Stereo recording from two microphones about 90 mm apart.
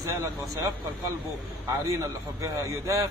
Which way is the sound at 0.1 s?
35° right (ahead or behind).